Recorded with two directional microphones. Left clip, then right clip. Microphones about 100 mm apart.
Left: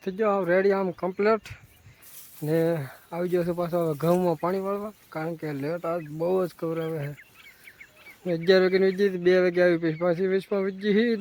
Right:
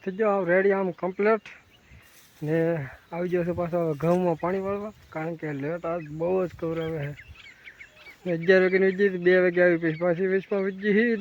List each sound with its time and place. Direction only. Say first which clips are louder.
0.0 s speech: even; 25° left (ahead or behind)
3.9 s speech: left 1 dB; 15° left (ahead or behind)
4.4 s speech: even; 30° left (ahead or behind)
8.4 s speech: even; 30° left (ahead or behind)